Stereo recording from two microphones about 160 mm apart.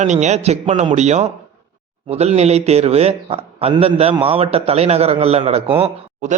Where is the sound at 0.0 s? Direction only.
45° right (ahead or behind).